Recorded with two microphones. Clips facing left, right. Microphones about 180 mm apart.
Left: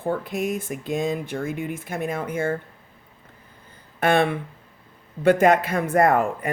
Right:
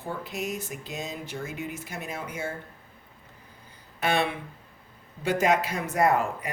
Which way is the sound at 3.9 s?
55° left (ahead or behind).